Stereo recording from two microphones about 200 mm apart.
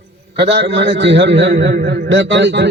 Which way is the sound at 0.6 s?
60° right (ahead or behind).